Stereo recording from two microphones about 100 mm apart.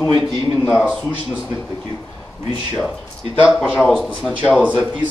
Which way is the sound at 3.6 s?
10° left (ahead or behind).